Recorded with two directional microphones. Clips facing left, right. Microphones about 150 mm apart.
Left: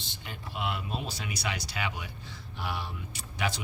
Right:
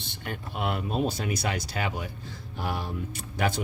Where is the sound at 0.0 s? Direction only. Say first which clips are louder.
Right 6 dB; 55° right (ahead or behind).